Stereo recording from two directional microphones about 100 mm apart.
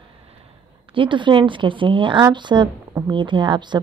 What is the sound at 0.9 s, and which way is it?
Speech, 55° right (ahead or behind).